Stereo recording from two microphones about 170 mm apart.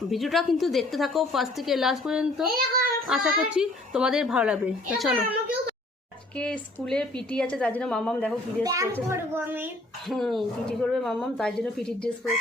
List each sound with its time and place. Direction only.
0.1 s a woman's voice: centre (ahead or behind)
2.5 s a child's voice: 60° right (ahead or behind)
3.1 s a woman's voice: 5° right (ahead or behind)
6.3 s a woman's voice: 5° left (ahead or behind)
8.6 s a child's voice: 20° right (ahead or behind)
10.1 s a woman's voice: centre (ahead or behind)